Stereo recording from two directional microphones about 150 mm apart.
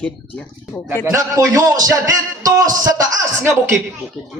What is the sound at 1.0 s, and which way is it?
A man's voice, 20° right (ahead or behind).